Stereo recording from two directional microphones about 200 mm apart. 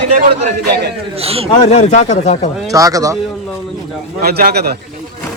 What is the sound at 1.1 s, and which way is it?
Speech, 30° right (ahead or behind).